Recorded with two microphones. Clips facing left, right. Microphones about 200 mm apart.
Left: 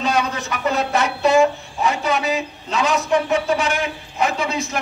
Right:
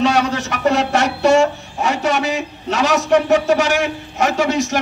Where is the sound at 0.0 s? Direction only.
80° right.